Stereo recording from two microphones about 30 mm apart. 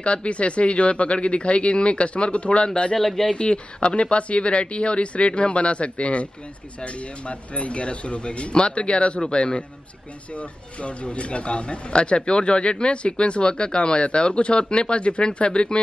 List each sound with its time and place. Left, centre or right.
0.0 s speech: left
3.0 s speech: centre
3.3 s speech: left